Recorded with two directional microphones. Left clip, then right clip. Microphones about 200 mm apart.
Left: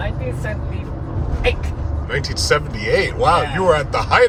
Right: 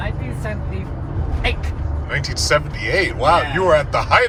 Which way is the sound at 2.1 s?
20° left (ahead or behind).